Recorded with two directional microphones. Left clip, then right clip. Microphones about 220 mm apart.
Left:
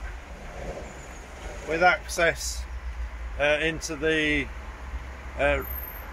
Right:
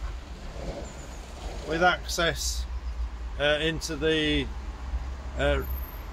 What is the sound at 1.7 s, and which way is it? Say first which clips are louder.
Speech: left 2 dB; 15° right (ahead or behind).